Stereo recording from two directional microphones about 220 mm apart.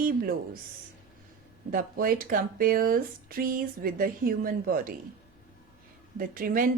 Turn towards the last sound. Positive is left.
turn(degrees=-40)  # may be behind; listen again after turning